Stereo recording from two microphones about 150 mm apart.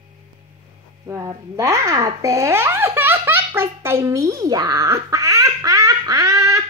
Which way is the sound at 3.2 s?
15° right (ahead or behind).